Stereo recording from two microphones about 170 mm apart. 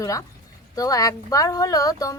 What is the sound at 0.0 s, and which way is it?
Speech, 20° left (ahead or behind).